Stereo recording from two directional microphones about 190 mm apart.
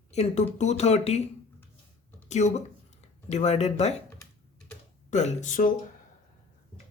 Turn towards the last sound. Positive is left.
turn(degrees=40)  # may be behind; listen again after turning